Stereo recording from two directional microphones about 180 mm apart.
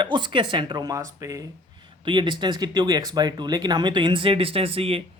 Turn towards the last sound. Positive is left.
turn(degrees=-30)  # may be behind; listen again after turning